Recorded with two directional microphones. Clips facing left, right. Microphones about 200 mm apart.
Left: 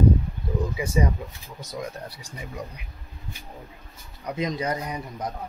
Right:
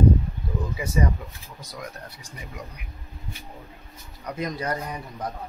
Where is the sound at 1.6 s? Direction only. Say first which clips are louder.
Left 5 dB; 25° left (ahead or behind).